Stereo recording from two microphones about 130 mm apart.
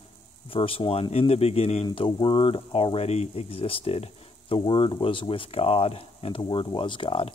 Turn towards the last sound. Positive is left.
turn(degrees=45)  # may be behind; listen again after turning